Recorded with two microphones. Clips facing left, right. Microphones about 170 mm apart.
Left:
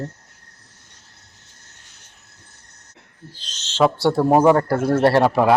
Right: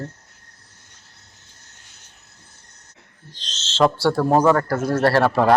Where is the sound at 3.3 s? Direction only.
10° left (ahead or behind).